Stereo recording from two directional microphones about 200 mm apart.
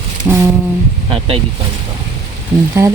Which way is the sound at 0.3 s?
10° right (ahead or behind).